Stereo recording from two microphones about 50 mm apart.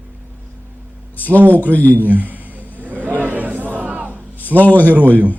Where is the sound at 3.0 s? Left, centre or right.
Right.